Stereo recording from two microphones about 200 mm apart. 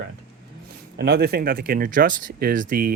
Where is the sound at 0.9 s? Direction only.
50° right (ahead or behind).